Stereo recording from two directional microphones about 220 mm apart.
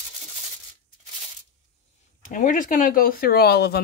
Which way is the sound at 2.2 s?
35° left (ahead or behind).